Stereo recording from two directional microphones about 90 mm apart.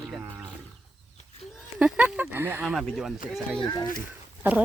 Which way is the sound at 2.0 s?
15° right (ahead or behind).